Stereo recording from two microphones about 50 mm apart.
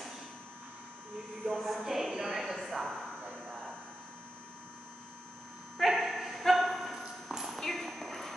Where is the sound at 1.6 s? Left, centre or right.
Centre.